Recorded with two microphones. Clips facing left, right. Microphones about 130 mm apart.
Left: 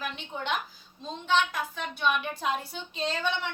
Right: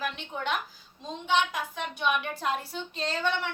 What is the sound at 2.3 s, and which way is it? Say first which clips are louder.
A woman's voice: even; centre (ahead or behind).